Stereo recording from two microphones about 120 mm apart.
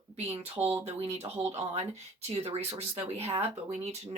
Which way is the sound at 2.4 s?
60° right (ahead or behind).